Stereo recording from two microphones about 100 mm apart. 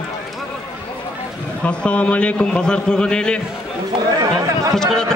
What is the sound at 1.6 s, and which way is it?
A man's voice, 10° left (ahead or behind).